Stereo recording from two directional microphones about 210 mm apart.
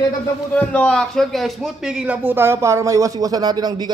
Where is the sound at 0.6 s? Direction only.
5° left (ahead or behind).